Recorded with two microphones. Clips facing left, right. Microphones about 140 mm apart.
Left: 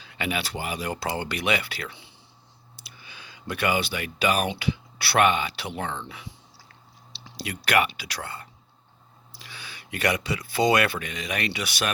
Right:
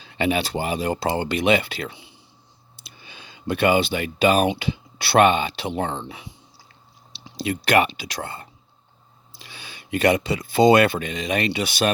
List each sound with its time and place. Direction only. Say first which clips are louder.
0.0 s speech: right 7 dB; 30° right (ahead or behind)
2.7 s a sound: right 2 dB; 25° right (ahead or behind)
4.6 s speech: right 1 dB; 25° right (ahead or behind)